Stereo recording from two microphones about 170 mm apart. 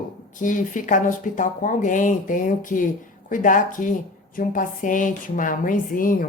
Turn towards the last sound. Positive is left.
turn(degrees=55)  # may be behind; listen again after turning